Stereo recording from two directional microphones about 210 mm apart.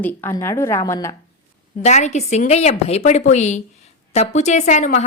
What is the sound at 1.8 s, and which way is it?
Speech, 35° left (ahead or behind).